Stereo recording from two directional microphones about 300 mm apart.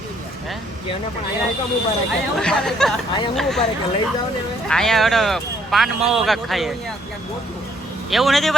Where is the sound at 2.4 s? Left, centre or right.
Centre.